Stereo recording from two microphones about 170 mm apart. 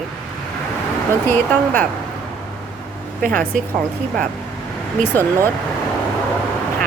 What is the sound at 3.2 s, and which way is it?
Speech, 50° right (ahead or behind).